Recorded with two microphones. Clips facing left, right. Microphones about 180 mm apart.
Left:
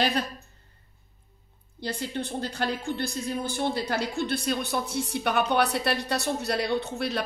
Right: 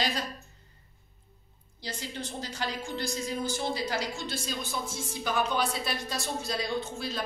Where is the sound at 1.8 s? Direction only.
60° left (ahead or behind).